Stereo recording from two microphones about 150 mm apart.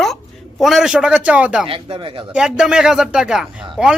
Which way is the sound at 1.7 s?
35° right (ahead or behind).